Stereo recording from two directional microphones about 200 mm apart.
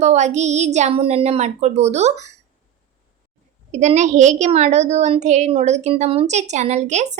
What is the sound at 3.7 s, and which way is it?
Speech, 35° right (ahead or behind).